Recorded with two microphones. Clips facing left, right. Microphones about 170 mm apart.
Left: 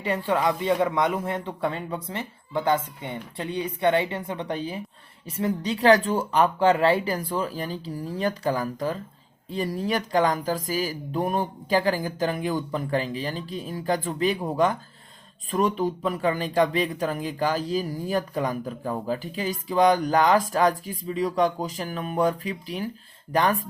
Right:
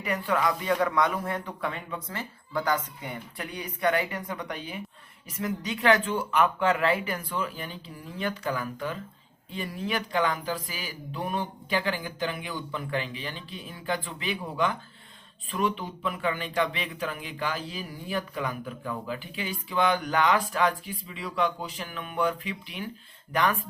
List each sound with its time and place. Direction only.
0.0 s speech: 30° left (ahead or behind)